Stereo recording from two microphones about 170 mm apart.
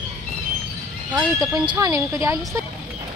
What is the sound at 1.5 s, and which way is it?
Speech, 20° right (ahead or behind).